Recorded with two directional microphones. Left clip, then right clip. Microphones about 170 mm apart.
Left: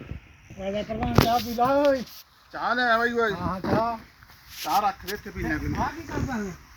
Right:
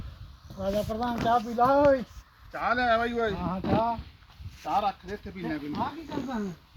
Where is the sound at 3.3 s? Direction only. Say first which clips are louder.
Left 4 dB; 15° left (ahead or behind).